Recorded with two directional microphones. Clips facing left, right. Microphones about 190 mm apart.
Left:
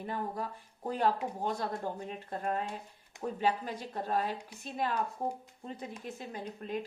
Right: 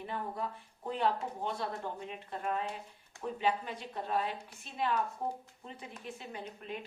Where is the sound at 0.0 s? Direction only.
40° left (ahead or behind).